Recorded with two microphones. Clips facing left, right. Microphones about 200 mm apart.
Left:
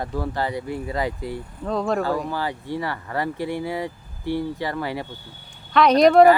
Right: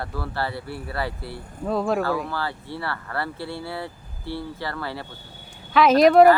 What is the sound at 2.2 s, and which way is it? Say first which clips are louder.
Speech: left 3 dB; 15° left (ahead or behind).